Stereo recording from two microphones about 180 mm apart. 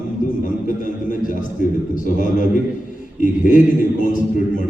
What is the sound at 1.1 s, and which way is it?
Speech, 50° left (ahead or behind).